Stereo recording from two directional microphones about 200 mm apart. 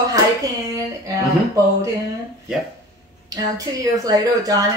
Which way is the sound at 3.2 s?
15° right (ahead or behind).